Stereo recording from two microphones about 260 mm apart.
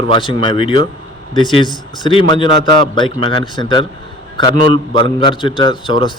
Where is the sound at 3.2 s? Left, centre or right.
Centre.